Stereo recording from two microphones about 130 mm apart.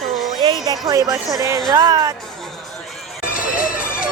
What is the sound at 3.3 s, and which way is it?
Music, 90° left.